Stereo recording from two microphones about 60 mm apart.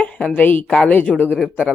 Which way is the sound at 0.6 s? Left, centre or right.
Centre.